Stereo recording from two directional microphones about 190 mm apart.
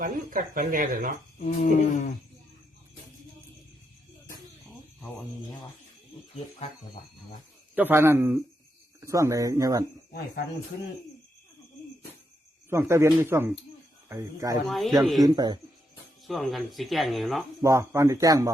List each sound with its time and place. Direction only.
0.0 s speech: 45° right (ahead or behind)
1.4 s a sound: 45° left (ahead or behind)
7.8 s speech: 10° right (ahead or behind)
12.7 s speech: 15° right (ahead or behind)
14.7 s speech: centre (ahead or behind)
15.2 s speech: 20° right (ahead or behind)
16.2 s speech: centre (ahead or behind)
17.6 s speech: 15° right (ahead or behind)